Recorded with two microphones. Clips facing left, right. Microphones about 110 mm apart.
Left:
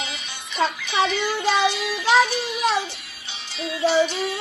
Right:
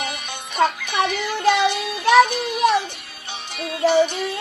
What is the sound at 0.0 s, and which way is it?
Music, 55° right (ahead or behind).